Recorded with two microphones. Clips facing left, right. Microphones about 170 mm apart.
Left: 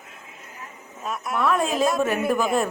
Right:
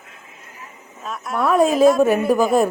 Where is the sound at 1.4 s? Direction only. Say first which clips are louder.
Right 6 dB; 40° right (ahead or behind).